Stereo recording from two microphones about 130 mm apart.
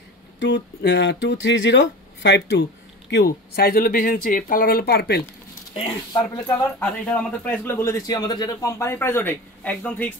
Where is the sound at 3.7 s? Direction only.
90° left.